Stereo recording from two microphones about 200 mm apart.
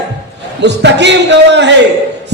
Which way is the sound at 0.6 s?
60° right (ahead or behind).